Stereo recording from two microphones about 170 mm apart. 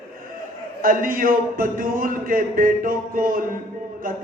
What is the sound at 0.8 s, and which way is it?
Speech, 55° right (ahead or behind).